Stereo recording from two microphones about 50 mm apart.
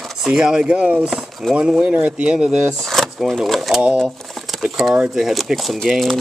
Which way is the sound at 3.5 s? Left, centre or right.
Centre.